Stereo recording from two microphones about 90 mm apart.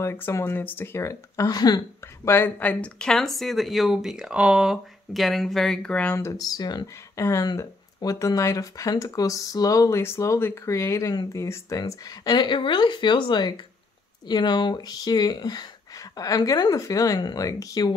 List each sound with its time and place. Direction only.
0.0 s speech: 30° left (ahead or behind); by 1.8 s 45° left (ahead or behind)
2.2 s speech: 25° left (ahead or behind)
6.1 s speech: 30° left (ahead or behind)
6.4 s speech: 50° left (ahead or behind)
7.2 s speech: 30° left (ahead or behind)
7.4 s speech: 45° left (ahead or behind)